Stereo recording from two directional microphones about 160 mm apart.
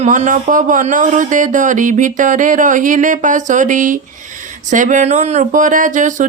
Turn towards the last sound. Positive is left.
turn(degrees=-50)  # may be behind; listen again after turning